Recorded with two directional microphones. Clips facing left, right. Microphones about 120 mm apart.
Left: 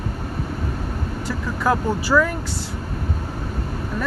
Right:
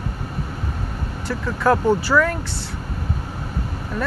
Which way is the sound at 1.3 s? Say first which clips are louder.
Right 3 dB; 10° left (ahead or behind).